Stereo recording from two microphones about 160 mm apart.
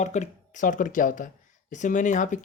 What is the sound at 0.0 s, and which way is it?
Speech, 45° left (ahead or behind).